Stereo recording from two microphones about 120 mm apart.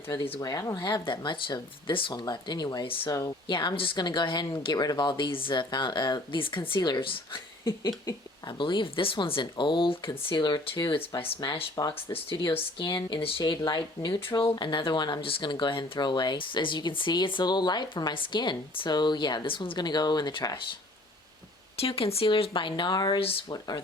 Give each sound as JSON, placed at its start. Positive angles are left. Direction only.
{"t": 0.3, "sound": "speech", "side_deg": 30}
{"t": 2.8, "sound": "speech", "side_deg": 50}
{"t": 3.1, "sound": "speech", "side_deg": 30}
{"t": 3.4, "sound": "speech", "side_deg": 40}
{"t": 8.4, "sound": "speech", "side_deg": 45}
{"t": 11.8, "sound": "speech", "side_deg": 30}
{"t": 12.1, "sound": "speech", "side_deg": 50}
{"t": 21.8, "sound": "speech", "side_deg": 50}